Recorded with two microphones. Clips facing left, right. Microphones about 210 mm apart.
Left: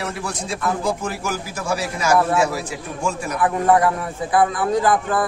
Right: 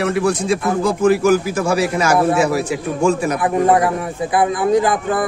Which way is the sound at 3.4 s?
15° right (ahead or behind).